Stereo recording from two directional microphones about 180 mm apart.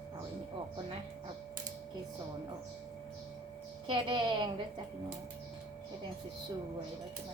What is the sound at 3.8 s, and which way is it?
Speech, 25° right (ahead or behind).